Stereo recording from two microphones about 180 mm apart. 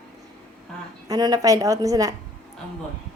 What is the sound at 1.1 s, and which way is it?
A woman's voice, 20° right (ahead or behind).